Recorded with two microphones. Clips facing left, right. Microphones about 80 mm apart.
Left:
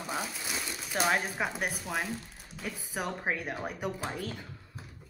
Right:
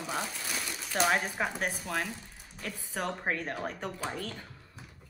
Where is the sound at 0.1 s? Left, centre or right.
Centre.